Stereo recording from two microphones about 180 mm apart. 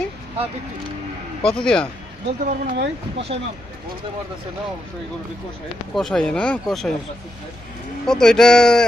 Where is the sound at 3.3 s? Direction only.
30° right (ahead or behind).